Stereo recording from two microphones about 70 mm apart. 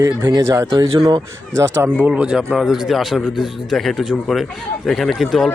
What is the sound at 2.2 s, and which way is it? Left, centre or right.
Speech, centre.